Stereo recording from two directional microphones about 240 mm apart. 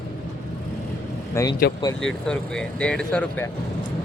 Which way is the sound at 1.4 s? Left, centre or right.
Centre.